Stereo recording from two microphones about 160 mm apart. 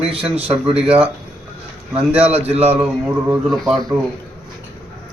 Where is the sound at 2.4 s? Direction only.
40° right (ahead or behind).